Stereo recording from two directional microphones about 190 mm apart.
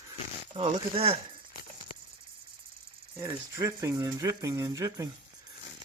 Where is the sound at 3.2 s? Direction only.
15° right (ahead or behind).